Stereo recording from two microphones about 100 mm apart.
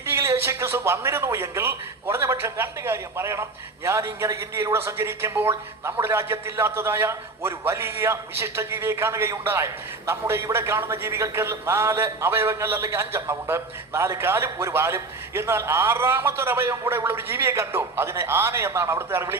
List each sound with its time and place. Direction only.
0.0 s a man's voice: 25° right (ahead or behind)